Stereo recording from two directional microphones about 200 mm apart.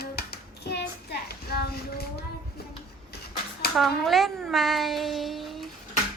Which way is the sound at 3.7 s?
Centre (ahead or behind).